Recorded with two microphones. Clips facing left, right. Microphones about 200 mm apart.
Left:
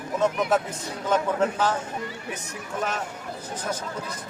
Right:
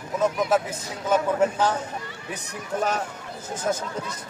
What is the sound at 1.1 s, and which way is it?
Speech, 10° right (ahead or behind).